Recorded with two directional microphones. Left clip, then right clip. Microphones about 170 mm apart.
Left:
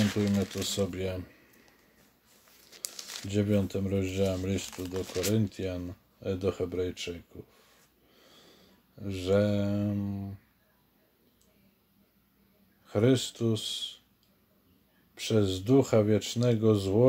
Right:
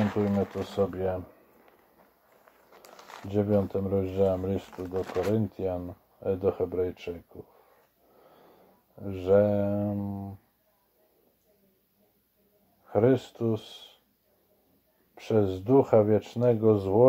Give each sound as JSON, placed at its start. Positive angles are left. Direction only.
{"t": 0.0, "sound": "speech", "side_deg": 5}
{"t": 2.7, "sound": "crumpling", "side_deg": 5}
{"t": 3.7, "sound": "speech", "side_deg": 15}
{"t": 9.0, "sound": "speech", "side_deg": 15}
{"t": 12.9, "sound": "speech", "side_deg": 15}
{"t": 15.1, "sound": "speech", "side_deg": 15}